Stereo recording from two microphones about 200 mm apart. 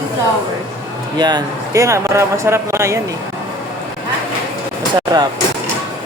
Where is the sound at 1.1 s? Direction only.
20° right (ahead or behind).